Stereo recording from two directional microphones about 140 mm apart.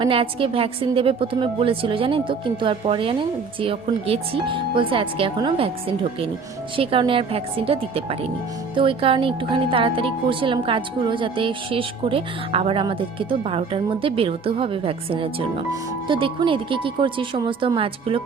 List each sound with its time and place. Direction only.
0.0 s a woman's voice: 40° right (ahead or behind)